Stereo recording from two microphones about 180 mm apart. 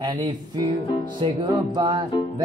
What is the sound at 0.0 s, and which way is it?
Music, 25° right (ahead or behind).